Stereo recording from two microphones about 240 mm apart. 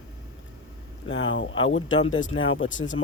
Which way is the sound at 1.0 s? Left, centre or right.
Left.